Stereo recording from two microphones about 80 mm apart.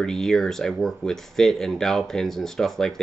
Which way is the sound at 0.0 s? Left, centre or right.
Centre.